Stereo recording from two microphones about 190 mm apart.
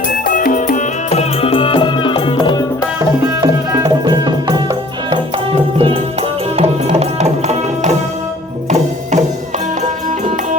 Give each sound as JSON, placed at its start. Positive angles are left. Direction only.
{"t": 0.3, "sound": "music", "side_deg": 45}
{"t": 3.4, "sound": "music", "side_deg": -20}